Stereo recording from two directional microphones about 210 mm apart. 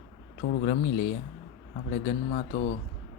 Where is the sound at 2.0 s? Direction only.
40° left (ahead or behind).